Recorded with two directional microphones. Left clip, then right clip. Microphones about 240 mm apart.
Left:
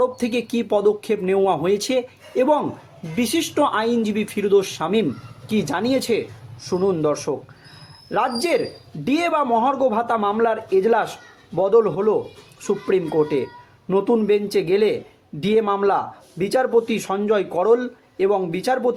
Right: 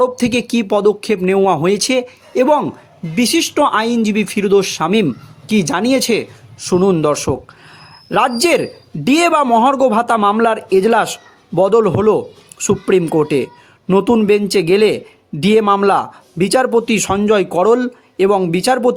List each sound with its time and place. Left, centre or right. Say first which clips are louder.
0.0 s speech: right 6 dB; right